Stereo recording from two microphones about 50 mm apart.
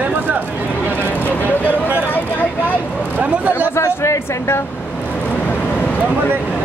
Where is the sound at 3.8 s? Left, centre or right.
Left.